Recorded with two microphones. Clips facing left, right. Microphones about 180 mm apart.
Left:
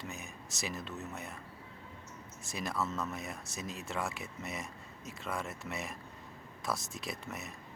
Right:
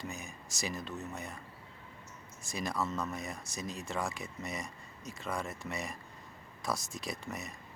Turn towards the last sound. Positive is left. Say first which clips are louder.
# right 1 dB
turn(degrees=5)  # may be behind; listen again after turning